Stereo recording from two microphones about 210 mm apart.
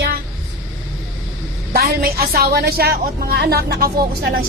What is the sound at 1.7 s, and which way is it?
A woman's voice, 45° right (ahead or behind).